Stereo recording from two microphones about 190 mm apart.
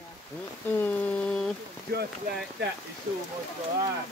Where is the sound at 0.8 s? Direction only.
5° left (ahead or behind).